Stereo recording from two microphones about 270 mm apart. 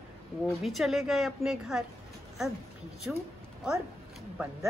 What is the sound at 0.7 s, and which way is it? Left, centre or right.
A woman's voice, centre.